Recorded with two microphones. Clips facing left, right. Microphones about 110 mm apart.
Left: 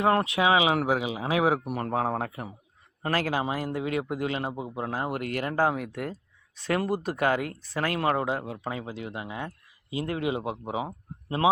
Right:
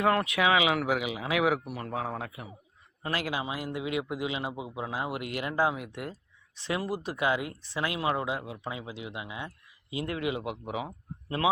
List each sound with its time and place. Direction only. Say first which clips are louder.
0.0 s speech: left 2 dB; 30° left (ahead or behind)
1.6 s speech: left 6 dB; 45° left (ahead or behind)
4.5 s speech: left 3 dB; 5° right (ahead or behind)
4.8 s speech: left 3 dB; 45° left (ahead or behind)
9.9 s a man's voice: left 3 dB; 35° left (ahead or behind)